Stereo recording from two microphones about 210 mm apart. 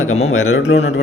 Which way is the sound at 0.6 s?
55° left (ahead or behind).